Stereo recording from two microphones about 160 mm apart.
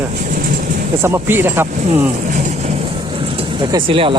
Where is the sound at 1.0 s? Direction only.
15° right (ahead or behind).